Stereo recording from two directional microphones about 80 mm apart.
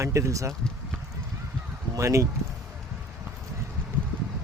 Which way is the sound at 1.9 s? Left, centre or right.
Right.